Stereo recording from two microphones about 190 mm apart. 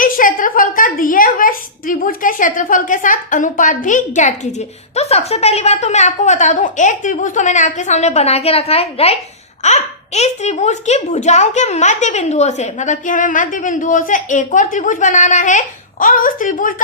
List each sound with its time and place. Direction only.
0.0 s a woman's voice: 45° left (ahead or behind)